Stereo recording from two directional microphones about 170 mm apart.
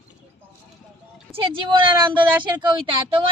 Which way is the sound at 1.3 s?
30° right (ahead or behind).